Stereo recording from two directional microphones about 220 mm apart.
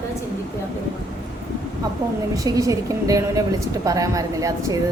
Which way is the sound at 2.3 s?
15° right (ahead or behind).